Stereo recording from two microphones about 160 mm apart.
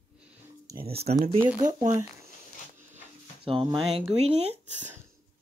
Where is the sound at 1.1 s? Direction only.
55° right (ahead or behind).